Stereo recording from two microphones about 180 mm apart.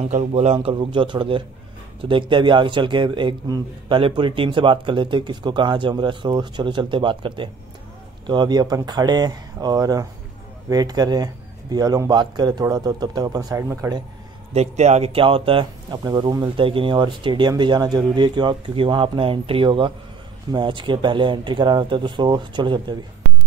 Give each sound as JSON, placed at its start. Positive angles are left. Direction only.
{"t": 0.1, "sound": "a man's voice", "side_deg": -40}
{"t": 14.5, "sound": "speech", "side_deg": -35}